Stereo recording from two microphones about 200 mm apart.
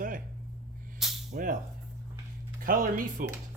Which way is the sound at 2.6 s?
45° right (ahead or behind).